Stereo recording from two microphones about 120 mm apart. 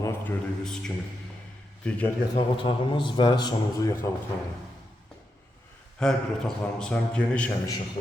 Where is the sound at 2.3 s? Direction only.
45° left (ahead or behind).